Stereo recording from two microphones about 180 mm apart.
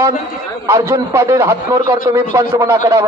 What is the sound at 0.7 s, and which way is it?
A man's voice, 15° right (ahead or behind).